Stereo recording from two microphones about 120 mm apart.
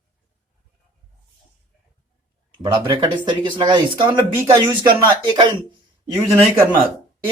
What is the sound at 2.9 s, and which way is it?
Speech, 40° right (ahead or behind).